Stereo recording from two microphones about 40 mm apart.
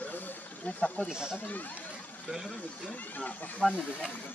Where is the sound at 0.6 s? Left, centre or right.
Left.